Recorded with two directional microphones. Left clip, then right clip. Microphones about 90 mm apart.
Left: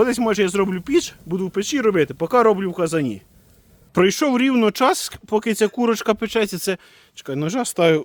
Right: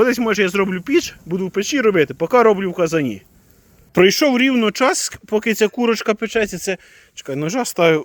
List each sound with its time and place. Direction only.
0.2 s speech: 10° left (ahead or behind)
4.5 s speech: 30° left (ahead or behind)
5.2 s speech: 15° left (ahead or behind)
6.1 s speech: 55° left (ahead or behind)
7.2 s speech: 30° left (ahead or behind)